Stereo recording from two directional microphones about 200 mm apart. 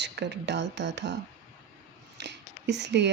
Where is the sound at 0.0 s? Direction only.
60° right (ahead or behind).